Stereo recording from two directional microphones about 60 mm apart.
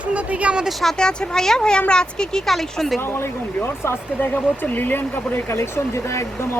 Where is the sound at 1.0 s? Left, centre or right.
Centre.